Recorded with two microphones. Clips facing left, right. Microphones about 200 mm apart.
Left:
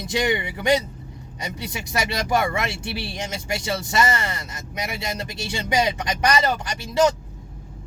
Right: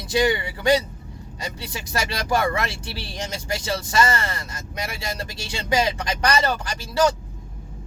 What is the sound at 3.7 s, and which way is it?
Speech, 20° left (ahead or behind).